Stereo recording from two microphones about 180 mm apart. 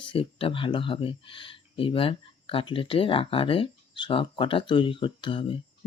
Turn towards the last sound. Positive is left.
turn(degrees=30)  # may be behind; listen again after turning